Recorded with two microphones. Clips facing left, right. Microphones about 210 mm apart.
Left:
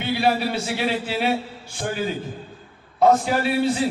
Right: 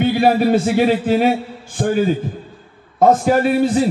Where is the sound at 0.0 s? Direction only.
45° right (ahead or behind).